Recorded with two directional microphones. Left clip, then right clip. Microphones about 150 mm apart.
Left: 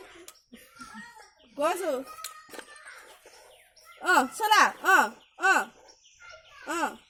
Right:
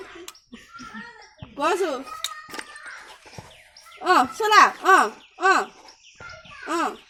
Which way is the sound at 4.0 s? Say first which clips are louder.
Right 5 dB; 70° left (ahead or behind).